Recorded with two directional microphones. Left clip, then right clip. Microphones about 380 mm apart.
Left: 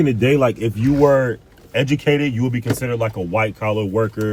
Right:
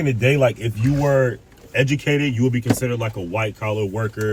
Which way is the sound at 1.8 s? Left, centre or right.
Centre.